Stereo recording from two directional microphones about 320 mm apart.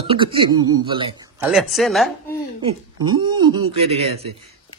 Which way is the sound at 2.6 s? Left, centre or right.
Centre.